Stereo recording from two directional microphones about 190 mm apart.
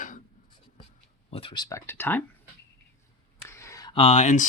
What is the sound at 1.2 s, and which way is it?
Speech, 30° left (ahead or behind).